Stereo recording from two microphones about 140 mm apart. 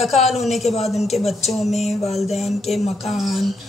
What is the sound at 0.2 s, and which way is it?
A woman's voice, centre (ahead or behind).